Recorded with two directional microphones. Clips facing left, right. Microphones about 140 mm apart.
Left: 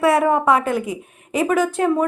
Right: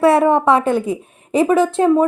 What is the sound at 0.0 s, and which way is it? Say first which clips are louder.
A woman's voice: right 4 dB; 25° right (ahead or behind).